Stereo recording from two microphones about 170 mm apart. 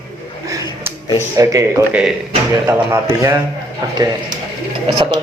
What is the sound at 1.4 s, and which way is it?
Speech, 20° right (ahead or behind).